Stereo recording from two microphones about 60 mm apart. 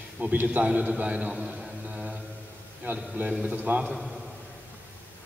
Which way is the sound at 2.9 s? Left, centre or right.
Right.